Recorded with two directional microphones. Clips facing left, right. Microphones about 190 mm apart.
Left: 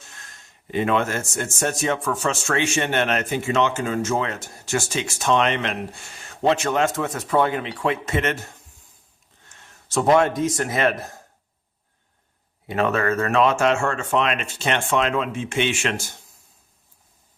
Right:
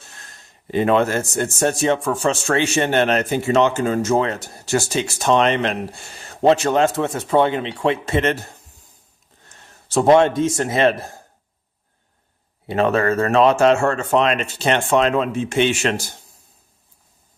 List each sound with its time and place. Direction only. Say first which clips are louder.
0.1 s speech: right 2 dB; 35° right (ahead or behind)
12.6 s speech: right 4 dB; 30° right (ahead or behind)